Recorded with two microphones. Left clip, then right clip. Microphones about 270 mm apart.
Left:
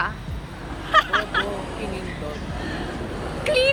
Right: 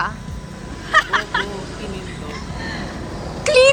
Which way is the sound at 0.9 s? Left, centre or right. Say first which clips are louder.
Right 2 dB; right.